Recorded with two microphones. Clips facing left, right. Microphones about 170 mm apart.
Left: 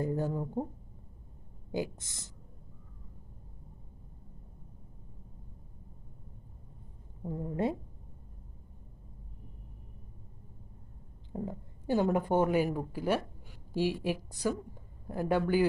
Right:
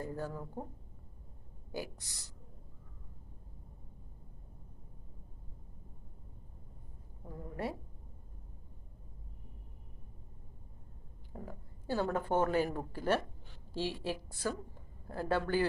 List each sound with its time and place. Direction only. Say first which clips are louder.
0.0 s speech: left 8 dB; 20° left (ahead or behind)
1.7 s speech: left 7 dB; 20° left (ahead or behind)
7.2 s speech: left 8 dB; 20° left (ahead or behind)
11.3 s a woman's voice: left 9 dB; 20° left (ahead or behind)